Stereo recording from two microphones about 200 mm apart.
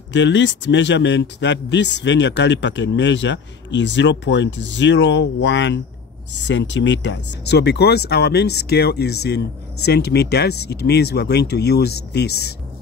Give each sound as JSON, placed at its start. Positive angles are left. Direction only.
{"t": 0.1, "sound": "a man's voice", "side_deg": 65}